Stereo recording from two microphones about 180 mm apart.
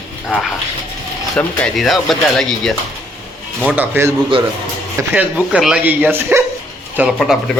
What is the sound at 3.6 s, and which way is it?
Speech, 10° right (ahead or behind).